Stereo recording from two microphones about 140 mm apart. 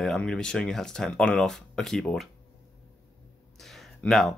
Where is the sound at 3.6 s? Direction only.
Centre (ahead or behind).